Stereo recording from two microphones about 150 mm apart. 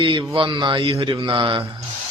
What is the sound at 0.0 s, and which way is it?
A man's voice, 35° right (ahead or behind).